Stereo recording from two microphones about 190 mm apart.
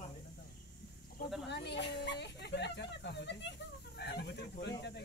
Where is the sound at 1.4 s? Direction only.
65° left (ahead or behind).